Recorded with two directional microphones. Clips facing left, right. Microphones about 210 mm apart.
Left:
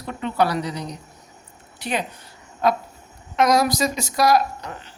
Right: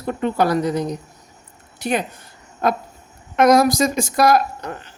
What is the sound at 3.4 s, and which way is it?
Speech, 50° right (ahead or behind).